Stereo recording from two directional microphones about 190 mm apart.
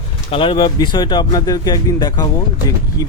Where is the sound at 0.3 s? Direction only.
25° left (ahead or behind).